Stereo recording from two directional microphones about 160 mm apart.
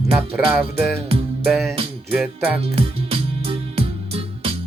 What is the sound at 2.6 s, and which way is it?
Music, 35° right (ahead or behind).